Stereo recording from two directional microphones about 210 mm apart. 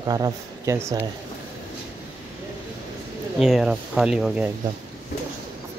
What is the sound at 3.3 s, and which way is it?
Speech, centre (ahead or behind).